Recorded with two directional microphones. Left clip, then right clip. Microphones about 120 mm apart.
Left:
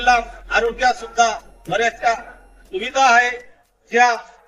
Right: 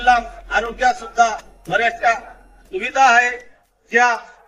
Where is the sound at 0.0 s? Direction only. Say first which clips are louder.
Right 1 dB; 15° left (ahead or behind).